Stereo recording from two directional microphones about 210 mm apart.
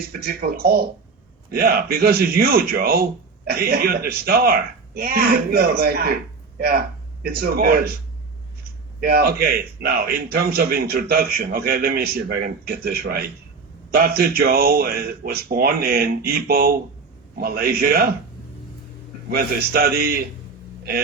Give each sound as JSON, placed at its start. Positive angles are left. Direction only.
{"t": 0.1, "sound": "speech", "side_deg": -45}
{"t": 9.0, "sound": "speech", "side_deg": -50}
{"t": 19.3, "sound": "speech", "side_deg": -45}